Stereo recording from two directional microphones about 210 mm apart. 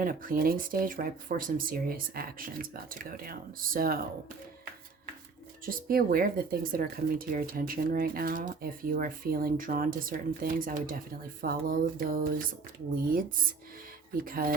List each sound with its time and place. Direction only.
0.0 s speech: 40° right (ahead or behind)
5.6 s speech: 45° right (ahead or behind)
14.3 s speech: 45° right (ahead or behind)